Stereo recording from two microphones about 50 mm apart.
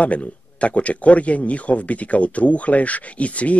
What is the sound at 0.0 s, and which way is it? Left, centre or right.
A man's voice, left.